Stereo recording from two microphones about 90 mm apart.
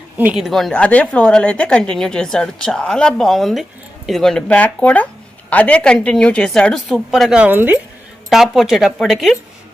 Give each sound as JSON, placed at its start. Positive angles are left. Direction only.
{"t": 0.3, "sound": "speech", "side_deg": 0}
{"t": 0.7, "sound": "a woman's voice", "side_deg": 15}
{"t": 7.4, "sound": "speech", "side_deg": -20}
{"t": 8.3, "sound": "speech", "side_deg": 0}